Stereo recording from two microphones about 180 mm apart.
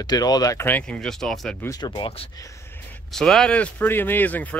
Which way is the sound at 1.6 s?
20° left (ahead or behind).